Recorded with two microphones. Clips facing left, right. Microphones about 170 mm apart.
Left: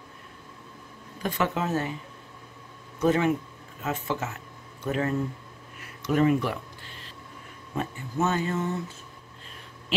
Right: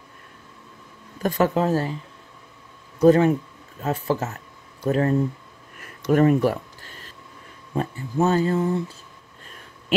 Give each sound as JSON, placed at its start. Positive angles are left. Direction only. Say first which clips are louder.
{"t": 1.2, "sound": "speech", "louder": "right 7 dB", "side_deg": -40}
{"t": 3.0, "sound": "speech", "louder": "right 7 dB", "side_deg": -35}
{"t": 5.8, "sound": "a sound", "louder": "right 5 dB", "side_deg": -50}
{"t": 7.7, "sound": "speech", "louder": "right 5 dB", "side_deg": -35}